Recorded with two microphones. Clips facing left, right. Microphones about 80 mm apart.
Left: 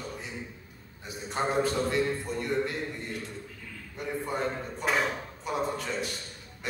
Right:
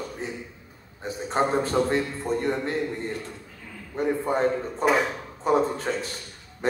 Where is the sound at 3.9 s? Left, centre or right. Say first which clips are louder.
Right 8 dB; right.